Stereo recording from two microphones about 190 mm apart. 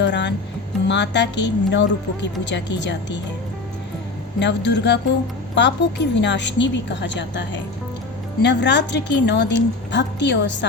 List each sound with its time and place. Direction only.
0.0 s music: 65° left (ahead or behind)
0.9 s a woman's voice: 65° left (ahead or behind)
4.4 s a woman's voice: 65° left (ahead or behind)